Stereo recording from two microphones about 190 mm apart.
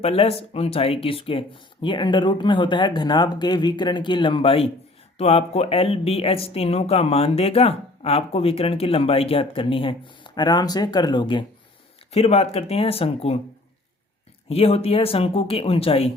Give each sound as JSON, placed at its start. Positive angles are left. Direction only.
{"t": 0.0, "sound": "speech", "side_deg": 30}
{"t": 14.5, "sound": "speech", "side_deg": 30}